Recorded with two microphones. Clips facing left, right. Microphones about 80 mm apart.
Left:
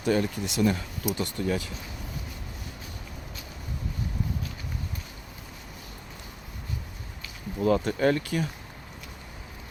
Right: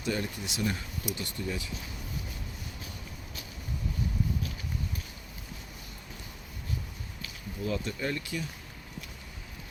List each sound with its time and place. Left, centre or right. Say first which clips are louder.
0.0 s speech: left 7 dB; left
7.6 s speech: left 10 dB; left